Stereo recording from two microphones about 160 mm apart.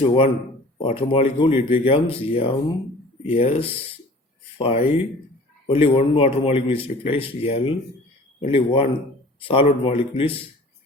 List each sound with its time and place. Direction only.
0.0 s a man's voice: 35° left (ahead or behind)